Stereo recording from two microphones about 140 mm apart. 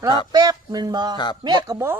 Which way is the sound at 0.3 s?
25° right (ahead or behind).